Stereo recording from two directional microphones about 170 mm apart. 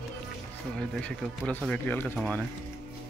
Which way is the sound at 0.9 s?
10° left (ahead or behind).